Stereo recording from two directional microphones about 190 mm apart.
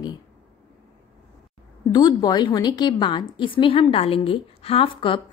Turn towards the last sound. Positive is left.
turn(degrees=25)  # may be behind; listen again after turning